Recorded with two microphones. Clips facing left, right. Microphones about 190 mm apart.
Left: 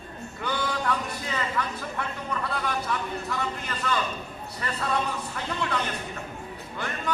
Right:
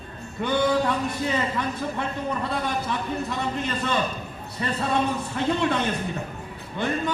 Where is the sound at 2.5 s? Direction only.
25° right (ahead or behind).